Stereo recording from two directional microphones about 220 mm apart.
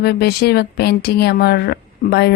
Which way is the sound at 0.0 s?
45° left (ahead or behind).